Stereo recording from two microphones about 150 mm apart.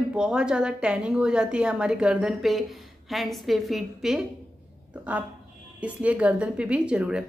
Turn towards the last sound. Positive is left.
turn(degrees=-5)  # may be behind; listen again after turning